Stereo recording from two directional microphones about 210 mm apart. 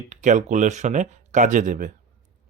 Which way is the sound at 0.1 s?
35° right (ahead or behind).